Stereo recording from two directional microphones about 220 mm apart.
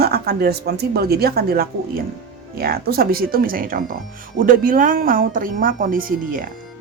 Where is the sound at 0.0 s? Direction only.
45° right (ahead or behind).